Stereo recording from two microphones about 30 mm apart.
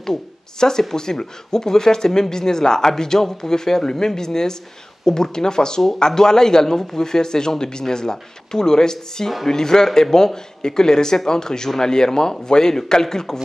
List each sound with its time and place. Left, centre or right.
0.0 s speech: centre